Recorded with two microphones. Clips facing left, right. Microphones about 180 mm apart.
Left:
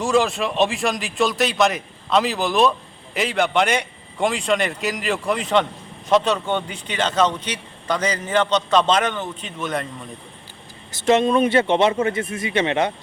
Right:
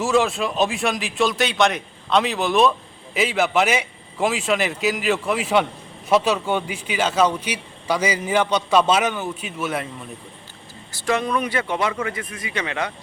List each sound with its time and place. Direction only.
0.0 s a man's voice: centre (ahead or behind)
10.9 s speech: 20° left (ahead or behind)